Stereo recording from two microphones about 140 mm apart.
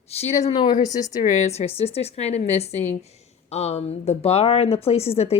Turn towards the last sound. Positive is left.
turn(degrees=45)  # may be behind; listen again after turning